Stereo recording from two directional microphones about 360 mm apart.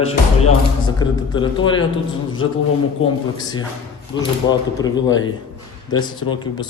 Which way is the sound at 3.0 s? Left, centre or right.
Left.